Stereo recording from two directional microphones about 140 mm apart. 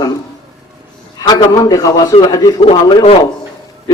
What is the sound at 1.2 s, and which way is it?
Speech, 30° left (ahead or behind).